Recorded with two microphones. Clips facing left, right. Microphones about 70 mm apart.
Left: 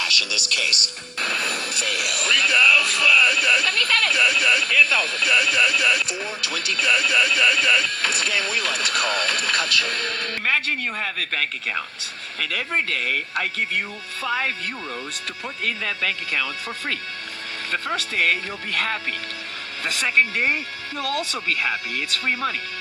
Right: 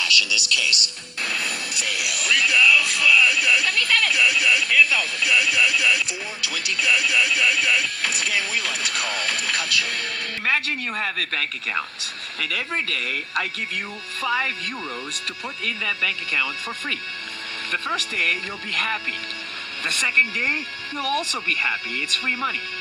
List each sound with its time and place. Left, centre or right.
0.0 s speech: left
10.9 s speech: right
12.5 s speech: left
15.6 s speech: left
17.7 s speech: left
21.0 s speech: right